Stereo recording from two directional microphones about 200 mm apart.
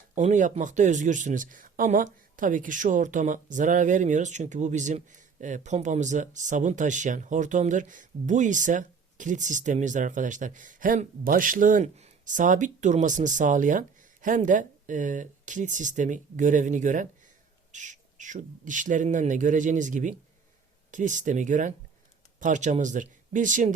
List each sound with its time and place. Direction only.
0.1 s speech: 40° right (ahead or behind)